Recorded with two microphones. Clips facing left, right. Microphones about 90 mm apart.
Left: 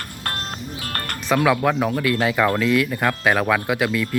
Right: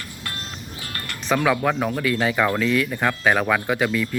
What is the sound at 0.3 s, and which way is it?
Music, 50° left (ahead or behind).